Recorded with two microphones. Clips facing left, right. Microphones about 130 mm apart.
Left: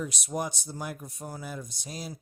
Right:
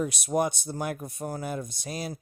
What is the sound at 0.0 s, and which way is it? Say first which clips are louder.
Speech: right 6 dB; 60° right (ahead or behind).